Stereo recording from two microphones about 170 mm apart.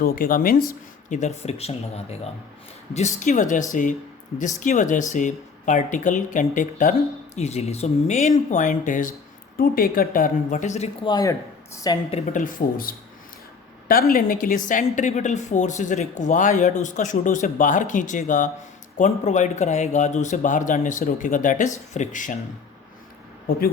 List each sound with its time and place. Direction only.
0.0 s speech: 55° left (ahead or behind)
1.2 s a woman's voice: 40° left (ahead or behind)
9.6 s speech: 60° left (ahead or behind); by 10.8 s 45° left (ahead or behind)
11.0 s speech: 20° left (ahead or behind)
12.2 s speech: 50° left (ahead or behind)
14.1 s a woman's voice: 55° left (ahead or behind)
23.5 s speech: 60° left (ahead or behind)